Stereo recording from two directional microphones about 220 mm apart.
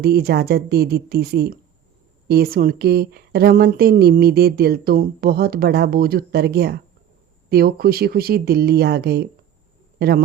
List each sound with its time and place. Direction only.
0.0 s speech: 45° right (ahead or behind)